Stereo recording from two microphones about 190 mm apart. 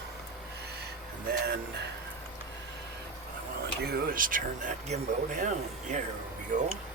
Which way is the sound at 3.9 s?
50° right (ahead or behind).